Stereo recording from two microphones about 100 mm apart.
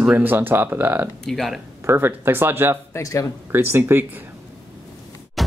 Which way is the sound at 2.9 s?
30° left (ahead or behind).